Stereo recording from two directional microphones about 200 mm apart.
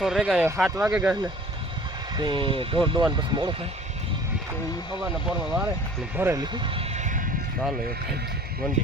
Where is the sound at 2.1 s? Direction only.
20° right (ahead or behind).